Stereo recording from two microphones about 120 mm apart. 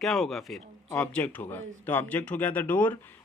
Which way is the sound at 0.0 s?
Centre (ahead or behind).